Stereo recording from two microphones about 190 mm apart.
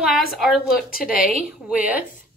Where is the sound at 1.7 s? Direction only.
5° right (ahead or behind).